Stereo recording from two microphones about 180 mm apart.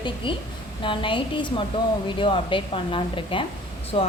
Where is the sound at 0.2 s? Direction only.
30° left (ahead or behind).